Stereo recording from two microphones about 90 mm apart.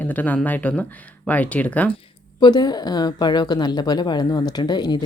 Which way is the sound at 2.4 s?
50° left (ahead or behind).